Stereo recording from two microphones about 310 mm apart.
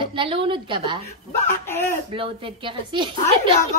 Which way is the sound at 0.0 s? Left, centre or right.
Centre.